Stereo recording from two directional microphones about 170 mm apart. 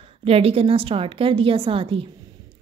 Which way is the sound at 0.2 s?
35° right (ahead or behind).